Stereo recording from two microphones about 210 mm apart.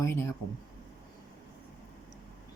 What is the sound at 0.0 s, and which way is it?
Speech, 10° left (ahead or behind).